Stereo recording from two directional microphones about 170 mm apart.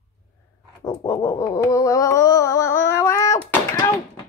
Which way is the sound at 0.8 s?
20° left (ahead or behind).